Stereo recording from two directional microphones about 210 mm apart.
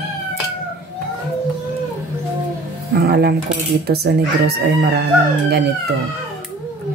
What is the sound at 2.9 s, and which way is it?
Speech, 50° right (ahead or behind).